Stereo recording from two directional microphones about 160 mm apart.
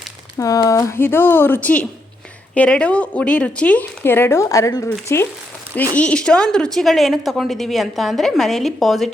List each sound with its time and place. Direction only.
0.3 s speech: 20° left (ahead or behind); by 9.0 s centre (ahead or behind)